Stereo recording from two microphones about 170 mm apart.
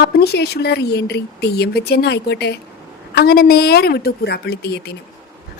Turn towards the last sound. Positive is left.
turn(degrees=70)  # may be behind; listen again after turning